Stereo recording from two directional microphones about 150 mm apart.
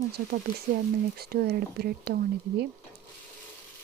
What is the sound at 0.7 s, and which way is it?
Speech, 90° right.